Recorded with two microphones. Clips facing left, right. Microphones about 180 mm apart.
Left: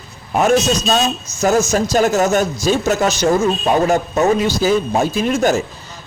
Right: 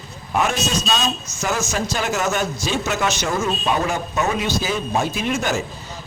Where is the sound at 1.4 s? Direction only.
40° left (ahead or behind).